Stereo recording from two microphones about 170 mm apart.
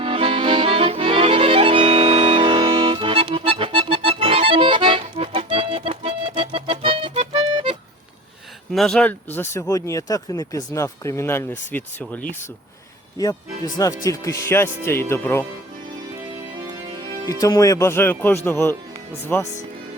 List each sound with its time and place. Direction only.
0.0 s accordion: 30° right (ahead or behind)
8.7 s speech: centre (ahead or behind)
13.7 s speech: 20° left (ahead or behind)
17.2 s speech: 20° left (ahead or behind)